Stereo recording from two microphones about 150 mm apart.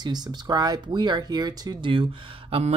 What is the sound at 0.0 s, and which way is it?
Speech, 30° right (ahead or behind).